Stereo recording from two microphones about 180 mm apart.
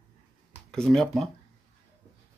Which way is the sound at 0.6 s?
Centre (ahead or behind).